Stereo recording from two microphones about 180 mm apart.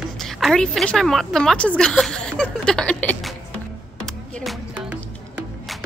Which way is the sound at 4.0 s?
Centre (ahead or behind).